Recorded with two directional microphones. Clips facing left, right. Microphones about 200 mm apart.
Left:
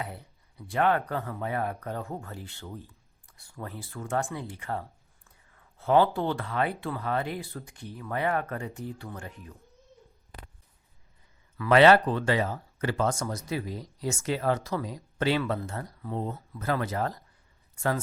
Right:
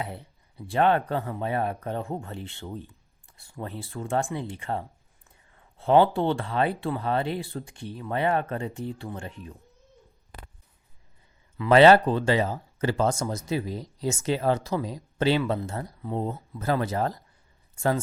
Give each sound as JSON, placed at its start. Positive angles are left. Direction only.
{"t": 0.0, "sound": "speech", "side_deg": -30}
{"t": 11.5, "sound": "speech", "side_deg": -25}